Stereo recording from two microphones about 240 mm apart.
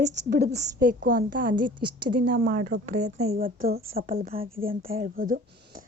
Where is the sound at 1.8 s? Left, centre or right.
Right.